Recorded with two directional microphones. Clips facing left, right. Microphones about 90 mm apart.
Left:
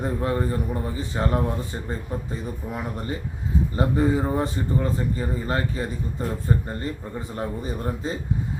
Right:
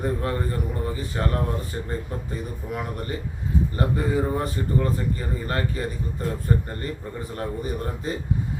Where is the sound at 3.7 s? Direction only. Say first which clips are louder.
Left 4 dB; 20° left (ahead or behind).